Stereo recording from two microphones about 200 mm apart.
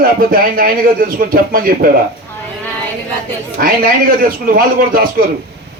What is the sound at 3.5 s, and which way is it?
Speech, 45° right (ahead or behind).